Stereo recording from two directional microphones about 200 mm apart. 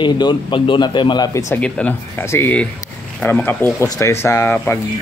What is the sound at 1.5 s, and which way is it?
Speech, 10° left (ahead or behind).